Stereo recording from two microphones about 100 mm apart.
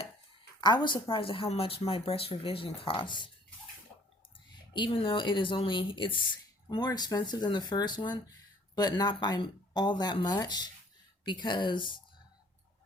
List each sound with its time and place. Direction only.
0.6 s speech: 50° left (ahead or behind)
1.0 s speech: 60° left (ahead or behind)
4.7 s speech: 55° left (ahead or behind)